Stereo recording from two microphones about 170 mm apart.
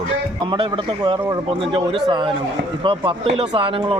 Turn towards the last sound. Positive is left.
turn(degrees=-30)  # may be behind; listen again after turning